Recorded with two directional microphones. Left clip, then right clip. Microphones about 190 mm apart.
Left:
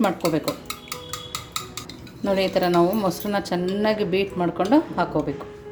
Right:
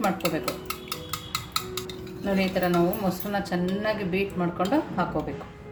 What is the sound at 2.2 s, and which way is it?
A woman's voice, 40° left (ahead or behind).